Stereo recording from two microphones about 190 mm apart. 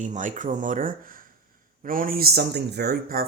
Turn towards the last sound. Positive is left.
turn(degrees=-50)  # may be behind; listen again after turning